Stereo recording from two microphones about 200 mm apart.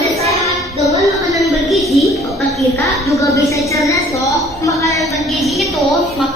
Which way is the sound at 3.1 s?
15° left (ahead or behind).